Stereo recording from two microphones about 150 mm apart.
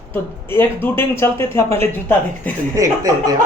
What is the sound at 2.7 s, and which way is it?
Speech, 20° right (ahead or behind).